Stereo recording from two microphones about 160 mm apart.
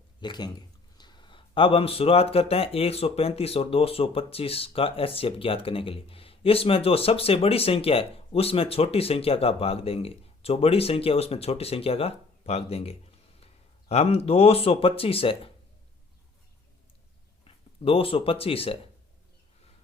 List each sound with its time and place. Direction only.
0.2 s speech: 25° left (ahead or behind)
17.4 s speech: 35° left (ahead or behind)